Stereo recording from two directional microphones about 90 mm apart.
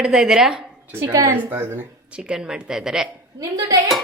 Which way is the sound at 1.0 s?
40° right (ahead or behind).